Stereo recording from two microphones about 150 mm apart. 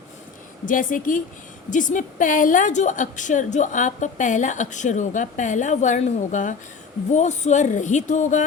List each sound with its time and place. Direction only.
0.6 s a woman's voice: 65° left (ahead or behind)